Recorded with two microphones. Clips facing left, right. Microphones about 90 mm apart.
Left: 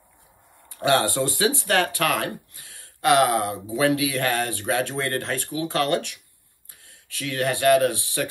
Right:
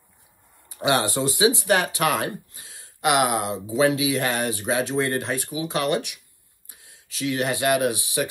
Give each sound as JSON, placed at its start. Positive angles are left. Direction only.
{"t": 0.7, "sound": "speech", "side_deg": -15}